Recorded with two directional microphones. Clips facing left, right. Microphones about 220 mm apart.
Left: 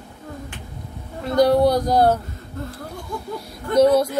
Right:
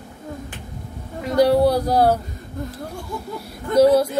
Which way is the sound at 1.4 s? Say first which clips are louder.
Even; 5° right (ahead or behind).